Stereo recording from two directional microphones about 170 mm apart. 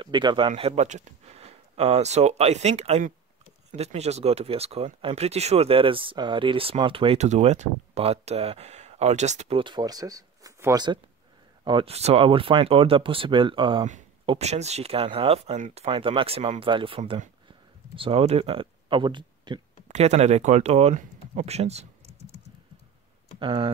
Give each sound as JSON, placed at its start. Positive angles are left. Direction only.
{"t": 0.0, "sound": "speech", "side_deg": -25}
{"t": 9.6, "sound": "speech", "side_deg": -25}
{"t": 19.9, "sound": "speech", "side_deg": -40}
{"t": 23.4, "sound": "speech", "side_deg": -30}